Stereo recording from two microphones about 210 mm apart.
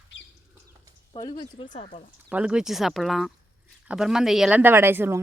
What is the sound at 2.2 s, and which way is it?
Speech, 5° right (ahead or behind).